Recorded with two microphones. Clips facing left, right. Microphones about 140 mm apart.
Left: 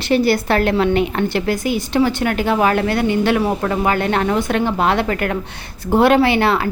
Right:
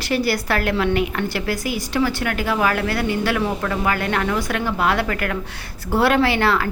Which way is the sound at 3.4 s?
35° left (ahead or behind).